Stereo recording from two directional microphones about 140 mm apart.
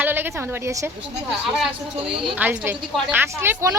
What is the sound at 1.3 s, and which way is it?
A woman's voice, centre (ahead or behind).